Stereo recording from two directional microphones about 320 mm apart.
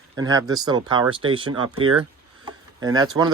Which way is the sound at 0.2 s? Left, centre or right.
Centre.